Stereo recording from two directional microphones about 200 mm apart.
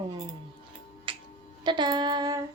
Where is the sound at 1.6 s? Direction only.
20° right (ahead or behind).